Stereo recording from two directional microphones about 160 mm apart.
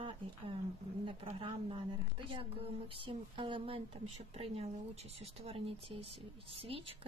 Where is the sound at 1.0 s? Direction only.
35° right (ahead or behind).